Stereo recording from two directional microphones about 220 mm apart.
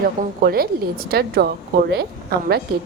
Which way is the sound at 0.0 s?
40° right (ahead or behind).